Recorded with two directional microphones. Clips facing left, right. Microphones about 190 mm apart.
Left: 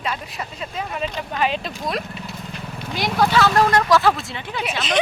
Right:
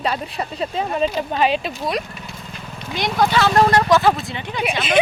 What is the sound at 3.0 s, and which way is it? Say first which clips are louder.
Speech: even; centre (ahead or behind).